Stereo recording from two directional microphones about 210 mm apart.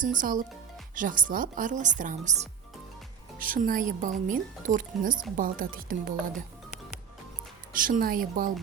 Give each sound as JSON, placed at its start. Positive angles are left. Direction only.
{"t": 0.0, "sound": "speech", "side_deg": -40}
{"t": 7.7, "sound": "speech", "side_deg": -40}